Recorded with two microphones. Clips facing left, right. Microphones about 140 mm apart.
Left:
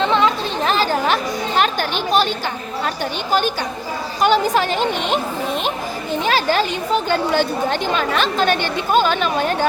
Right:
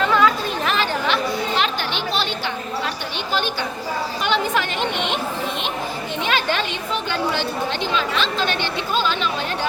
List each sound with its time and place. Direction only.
0.0 s chatter: 25° left (ahead or behind); by 2.2 s 45° left (ahead or behind)
4.2 s a woman's voice: 40° left (ahead or behind)
6.2 s a woman's voice: 40° left (ahead or behind)